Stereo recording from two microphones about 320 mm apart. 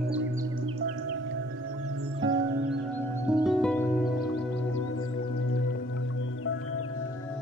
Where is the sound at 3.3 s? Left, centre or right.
Centre.